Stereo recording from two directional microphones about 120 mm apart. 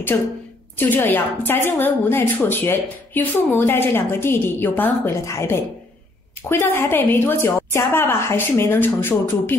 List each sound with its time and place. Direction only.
0.1 s a woman's voice: 20° left (ahead or behind)